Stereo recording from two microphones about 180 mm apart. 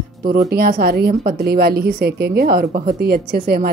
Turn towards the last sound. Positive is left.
turn(degrees=-55)  # may be behind; listen again after turning